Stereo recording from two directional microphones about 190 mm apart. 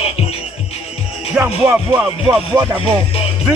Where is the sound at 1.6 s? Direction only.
10° right (ahead or behind).